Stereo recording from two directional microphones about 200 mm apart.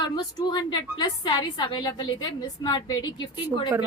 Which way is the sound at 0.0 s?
20° left (ahead or behind).